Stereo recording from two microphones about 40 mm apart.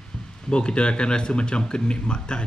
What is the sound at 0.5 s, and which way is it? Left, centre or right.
Speech, left.